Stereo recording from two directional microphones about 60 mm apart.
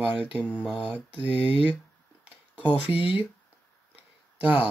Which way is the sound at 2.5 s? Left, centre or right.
Right.